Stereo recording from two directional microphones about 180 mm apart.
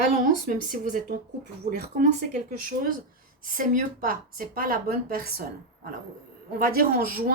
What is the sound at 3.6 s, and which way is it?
Speech, 50° right (ahead or behind).